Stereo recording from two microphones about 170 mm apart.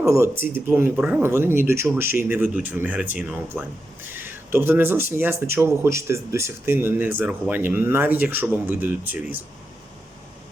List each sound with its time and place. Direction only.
0.0 s speech: 15° right (ahead or behind)